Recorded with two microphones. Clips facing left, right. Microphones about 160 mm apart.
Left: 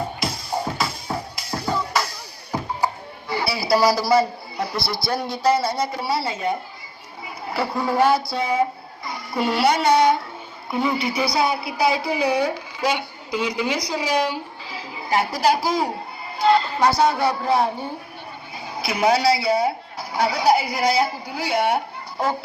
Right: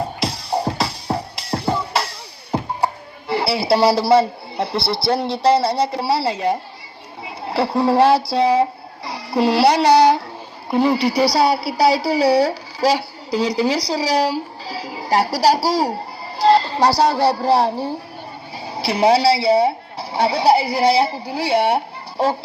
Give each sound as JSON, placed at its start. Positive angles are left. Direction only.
{"t": 0.5, "sound": "music", "side_deg": -35}
{"t": 2.5, "sound": "a woman's voice", "side_deg": -30}